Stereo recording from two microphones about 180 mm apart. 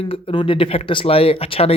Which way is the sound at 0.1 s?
30° left (ahead or behind).